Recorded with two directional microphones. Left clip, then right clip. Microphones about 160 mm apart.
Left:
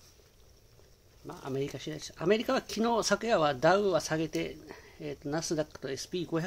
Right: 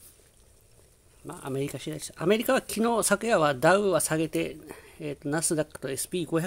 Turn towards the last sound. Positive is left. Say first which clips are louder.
# right 5 dB
turn(degrees=-45)  # may be behind; listen again after turning